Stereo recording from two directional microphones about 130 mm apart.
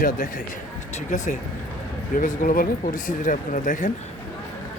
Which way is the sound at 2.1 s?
90° left.